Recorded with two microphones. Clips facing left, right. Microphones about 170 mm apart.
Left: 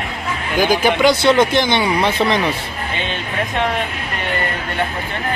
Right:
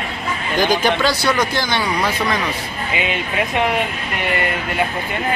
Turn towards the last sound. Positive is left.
turn(degrees=-5)  # may be behind; listen again after turning